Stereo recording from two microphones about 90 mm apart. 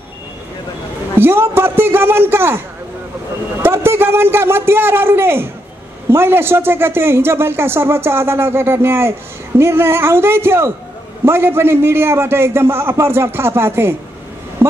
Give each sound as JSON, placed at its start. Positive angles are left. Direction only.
{"t": 1.1, "sound": "a man's voice", "side_deg": -25}